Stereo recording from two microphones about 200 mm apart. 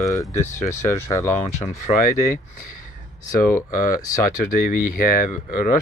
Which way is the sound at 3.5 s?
40° left (ahead or behind).